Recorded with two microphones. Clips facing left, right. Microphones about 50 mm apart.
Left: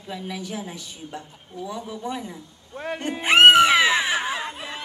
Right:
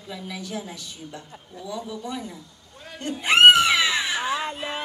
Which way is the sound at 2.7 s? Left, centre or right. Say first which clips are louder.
Left 12 dB; left.